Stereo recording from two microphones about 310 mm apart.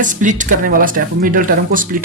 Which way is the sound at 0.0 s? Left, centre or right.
Right.